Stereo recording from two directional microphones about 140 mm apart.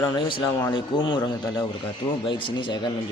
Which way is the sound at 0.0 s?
35° left (ahead or behind).